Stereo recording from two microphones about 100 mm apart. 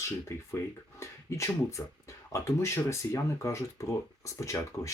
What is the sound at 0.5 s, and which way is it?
Speech, 30° left (ahead or behind).